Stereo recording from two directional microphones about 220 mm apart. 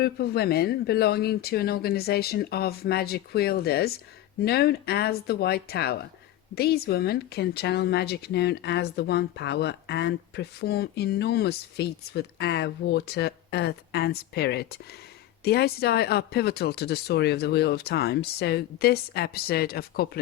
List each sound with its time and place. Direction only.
0.0 s speech: 45° left (ahead or behind)